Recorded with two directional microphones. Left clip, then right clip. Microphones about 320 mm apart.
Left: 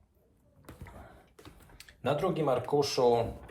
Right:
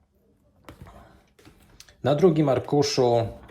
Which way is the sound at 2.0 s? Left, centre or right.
Right.